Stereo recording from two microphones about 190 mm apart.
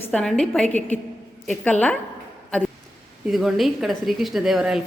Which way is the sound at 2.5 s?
5° left (ahead or behind).